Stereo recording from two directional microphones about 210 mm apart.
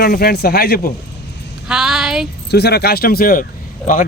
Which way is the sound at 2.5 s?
50° left (ahead or behind).